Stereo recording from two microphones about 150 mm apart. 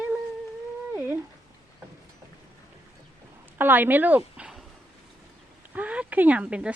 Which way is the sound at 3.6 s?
15° right (ahead or behind).